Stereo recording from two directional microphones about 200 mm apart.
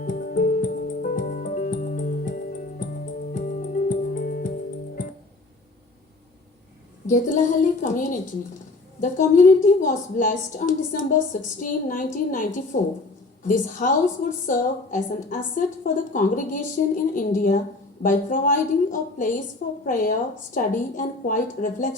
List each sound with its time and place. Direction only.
0.0 s music: 45° left (ahead or behind)
7.1 s a woman's voice: 40° left (ahead or behind)